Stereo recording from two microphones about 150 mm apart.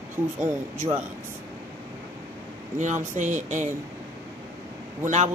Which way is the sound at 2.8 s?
55° right (ahead or behind).